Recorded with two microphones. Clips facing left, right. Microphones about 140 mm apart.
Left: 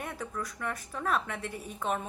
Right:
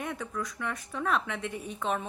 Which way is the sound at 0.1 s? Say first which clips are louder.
Right 2 dB; 35° left (ahead or behind).